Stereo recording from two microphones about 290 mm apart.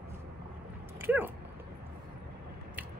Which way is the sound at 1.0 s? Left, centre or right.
Centre.